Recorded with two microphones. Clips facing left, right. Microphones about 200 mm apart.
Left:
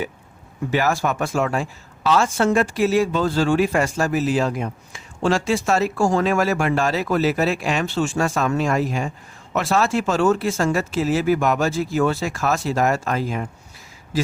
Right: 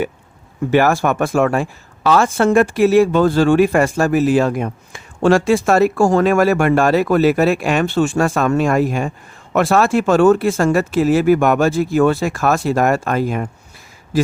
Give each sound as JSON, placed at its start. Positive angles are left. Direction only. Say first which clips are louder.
{"t": 0.7, "sound": "speech", "louder": "right 6 dB", "side_deg": -60}